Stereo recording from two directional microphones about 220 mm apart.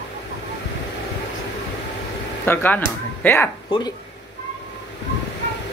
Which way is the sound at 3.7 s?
20° left (ahead or behind).